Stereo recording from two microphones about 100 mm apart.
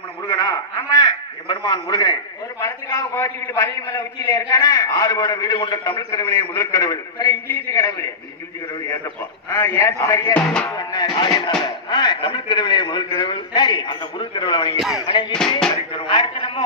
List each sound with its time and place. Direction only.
0.3 s a sound: 40° left (ahead or behind)
1.7 s a man's voice: 35° left (ahead or behind)
7.7 s a man's voice: 30° left (ahead or behind)
9.5 s a man's voice: 25° left (ahead or behind)
10.4 s music: 10° left (ahead or behind)
10.7 s music: 40° left (ahead or behind)
11.1 s a man's voice: 45° left (ahead or behind)
14.8 s a sound: centre (ahead or behind)
15.0 s a man's voice: 55° left (ahead or behind)